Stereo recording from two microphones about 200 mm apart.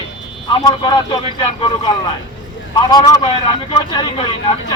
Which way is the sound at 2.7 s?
20° left (ahead or behind).